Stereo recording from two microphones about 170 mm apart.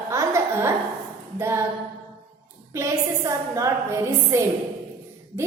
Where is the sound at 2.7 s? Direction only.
15° right (ahead or behind).